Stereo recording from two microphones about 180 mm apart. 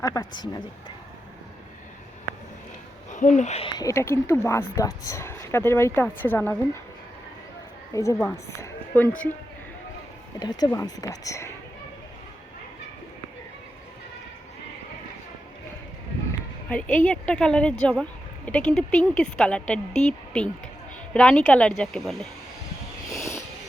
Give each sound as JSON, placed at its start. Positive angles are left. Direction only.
{"t": 0.0, "sound": "speech", "side_deg": 20}
{"t": 3.1, "sound": "speech", "side_deg": 45}
{"t": 7.9, "sound": "speech", "side_deg": 20}
{"t": 10.4, "sound": "speech", "side_deg": 20}
{"t": 16.6, "sound": "a woman's voice", "side_deg": 5}
{"t": 23.1, "sound": "a sound", "side_deg": 15}